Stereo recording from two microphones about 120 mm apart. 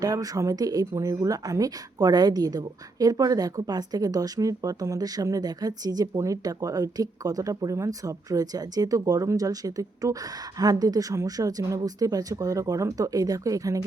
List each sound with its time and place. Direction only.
0.0 s speech: 30° right (ahead or behind)